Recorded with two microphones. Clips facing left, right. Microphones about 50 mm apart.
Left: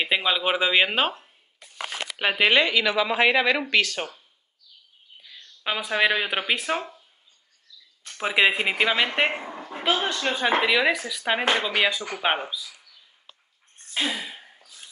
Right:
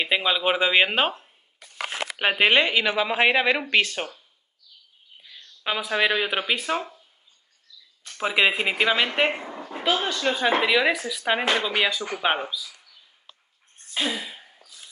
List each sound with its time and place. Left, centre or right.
0.0 s speech: centre
2.1 s speech: centre
5.6 s speech: centre
8.2 s speech: centre
9.7 s dog: centre
9.9 s speech: left
10.2 s speech: centre
13.9 s gasp: centre